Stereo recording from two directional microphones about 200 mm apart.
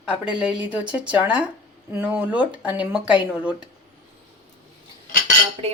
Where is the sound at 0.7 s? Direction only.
5° right (ahead or behind).